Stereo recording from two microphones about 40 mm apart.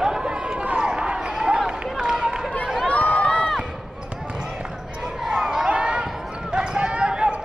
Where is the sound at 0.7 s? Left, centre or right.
Centre.